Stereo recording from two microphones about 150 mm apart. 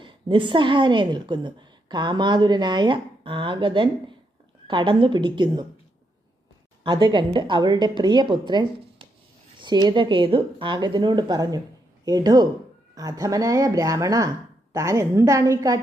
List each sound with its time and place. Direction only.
0.0 s a woman's voice: 35° right (ahead or behind)
6.8 s a woman's voice: 30° right (ahead or behind)